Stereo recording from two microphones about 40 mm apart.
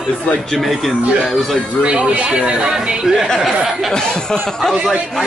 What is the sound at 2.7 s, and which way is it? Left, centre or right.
Speech, centre.